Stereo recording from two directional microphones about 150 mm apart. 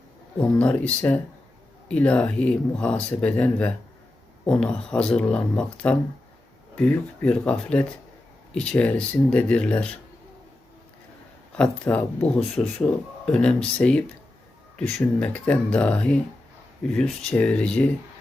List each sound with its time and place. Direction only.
0.3 s speech: 5° left (ahead or behind)
11.5 s speech: 10° left (ahead or behind)